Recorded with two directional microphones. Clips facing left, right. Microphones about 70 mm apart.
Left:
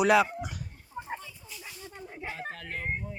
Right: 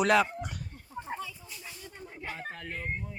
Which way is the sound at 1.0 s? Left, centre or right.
Centre.